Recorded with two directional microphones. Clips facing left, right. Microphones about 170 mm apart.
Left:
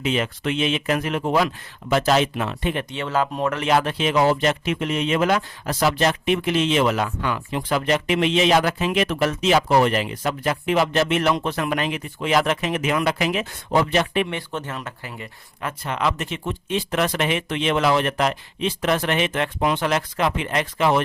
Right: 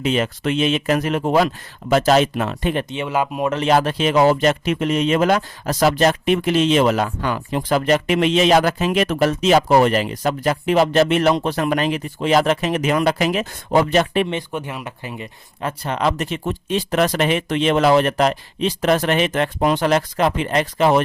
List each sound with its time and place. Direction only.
0.0 s speech: 40° right (ahead or behind)
2.9 s speech: 15° right (ahead or behind)
3.6 s speech: 35° right (ahead or behind)
14.3 s speech: 15° right (ahead or behind)
15.8 s speech: 35° right (ahead or behind)